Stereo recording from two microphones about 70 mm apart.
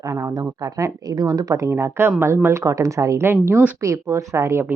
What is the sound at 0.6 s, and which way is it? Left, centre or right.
Speech, right.